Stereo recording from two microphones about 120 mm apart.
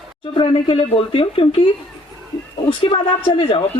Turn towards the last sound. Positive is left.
turn(degrees=45)  # may be behind; listen again after turning